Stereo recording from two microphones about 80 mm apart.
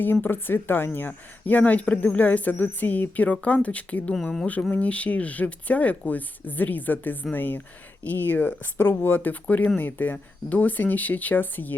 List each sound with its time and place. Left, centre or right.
0.0 s speech: left
4.1 s speech: centre
4.7 s speech: centre